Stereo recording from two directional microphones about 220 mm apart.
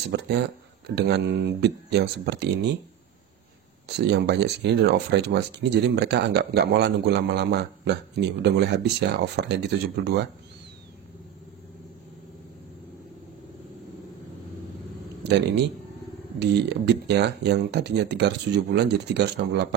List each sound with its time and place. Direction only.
0.1 s speech: 50° right (ahead or behind)
3.8 s speech: 50° right (ahead or behind)
15.2 s speech: 50° right (ahead or behind)